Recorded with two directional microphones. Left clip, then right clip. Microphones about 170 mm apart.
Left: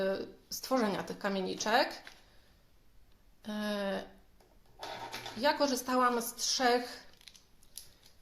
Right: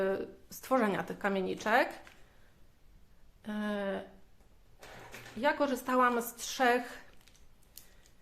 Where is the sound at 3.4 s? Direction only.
10° right (ahead or behind).